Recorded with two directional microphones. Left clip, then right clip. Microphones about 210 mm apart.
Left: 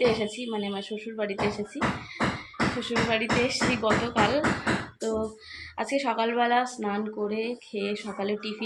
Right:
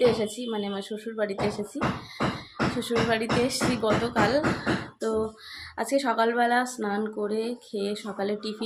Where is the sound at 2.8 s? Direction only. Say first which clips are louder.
Right 2 dB; 20° right (ahead or behind).